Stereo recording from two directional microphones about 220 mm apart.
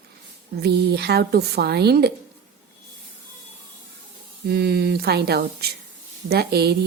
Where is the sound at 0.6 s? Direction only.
50° right (ahead or behind).